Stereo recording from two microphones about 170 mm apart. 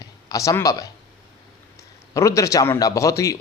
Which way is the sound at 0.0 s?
20° left (ahead or behind).